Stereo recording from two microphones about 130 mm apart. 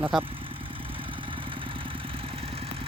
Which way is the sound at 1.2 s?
40° right (ahead or behind).